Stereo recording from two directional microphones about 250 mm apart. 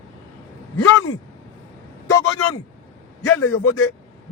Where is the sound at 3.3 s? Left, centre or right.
Left.